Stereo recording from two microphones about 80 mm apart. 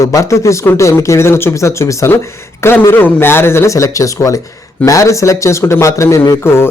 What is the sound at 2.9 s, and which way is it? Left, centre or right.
A man's voice, left.